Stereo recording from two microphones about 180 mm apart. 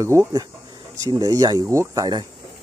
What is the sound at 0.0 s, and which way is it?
Speech, 15° right (ahead or behind).